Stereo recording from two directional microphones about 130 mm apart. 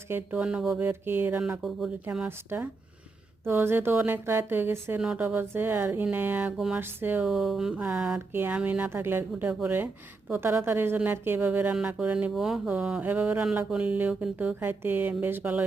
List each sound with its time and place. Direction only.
0.3 s speech: 5° right (ahead or behind)
0.8 s a woman's voice: 15° right (ahead or behind)
1.4 s a woman's voice: 5° right (ahead or behind)
7.3 s a woman's voice: centre (ahead or behind)